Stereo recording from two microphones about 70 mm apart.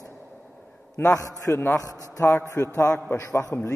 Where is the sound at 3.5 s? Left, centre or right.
Left.